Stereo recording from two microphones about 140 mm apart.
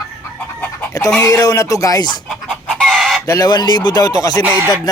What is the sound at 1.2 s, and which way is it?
Speech, 25° left (ahead or behind).